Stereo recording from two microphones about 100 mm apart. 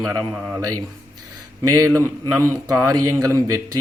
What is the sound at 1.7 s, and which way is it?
Speech, 30° right (ahead or behind).